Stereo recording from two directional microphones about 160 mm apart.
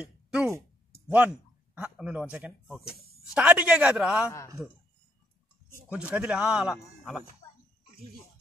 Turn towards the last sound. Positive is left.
turn(degrees=-5)  # may be behind; listen again after turning